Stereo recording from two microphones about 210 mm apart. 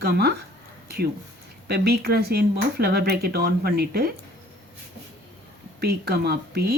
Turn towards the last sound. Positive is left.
turn(degrees=-50)  # may be behind; listen again after turning